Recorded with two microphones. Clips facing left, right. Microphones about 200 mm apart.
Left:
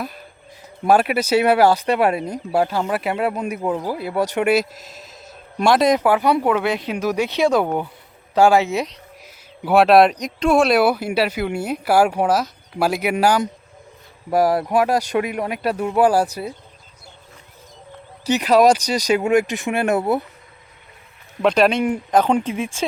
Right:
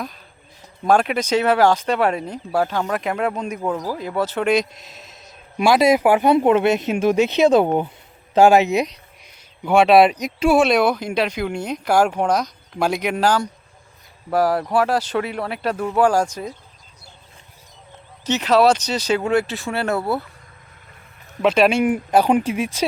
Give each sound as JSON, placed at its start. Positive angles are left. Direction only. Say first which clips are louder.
{"t": 0.9, "sound": "speech", "louder": "left 1 dB", "side_deg": 5}
{"t": 9.6, "sound": "speech", "louder": "even", "side_deg": 0}
{"t": 18.2, "sound": "speech", "louder": "left 1 dB", "side_deg": 10}
{"t": 21.4, "sound": "speech", "louder": "even", "side_deg": -5}